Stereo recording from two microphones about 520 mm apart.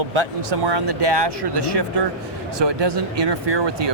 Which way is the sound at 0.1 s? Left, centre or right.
Right.